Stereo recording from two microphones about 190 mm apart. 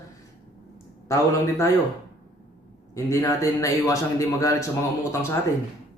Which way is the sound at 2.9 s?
15° left (ahead or behind).